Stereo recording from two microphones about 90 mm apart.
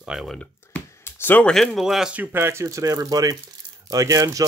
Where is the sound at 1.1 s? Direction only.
25° left (ahead or behind).